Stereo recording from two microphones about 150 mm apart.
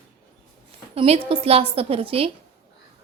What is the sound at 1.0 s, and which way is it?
A woman's voice, 40° right (ahead or behind).